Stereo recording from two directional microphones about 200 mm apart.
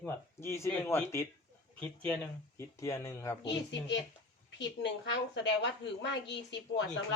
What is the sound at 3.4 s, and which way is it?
A woman's voice, 65° left (ahead or behind).